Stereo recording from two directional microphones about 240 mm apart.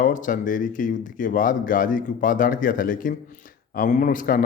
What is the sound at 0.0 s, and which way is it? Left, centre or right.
Speech, left.